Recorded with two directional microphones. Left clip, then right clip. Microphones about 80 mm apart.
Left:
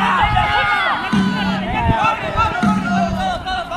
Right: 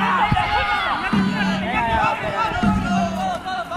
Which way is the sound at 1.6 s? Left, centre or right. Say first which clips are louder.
Left 1 dB; right.